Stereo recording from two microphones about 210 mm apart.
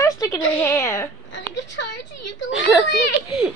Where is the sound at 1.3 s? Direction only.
60° left (ahead or behind).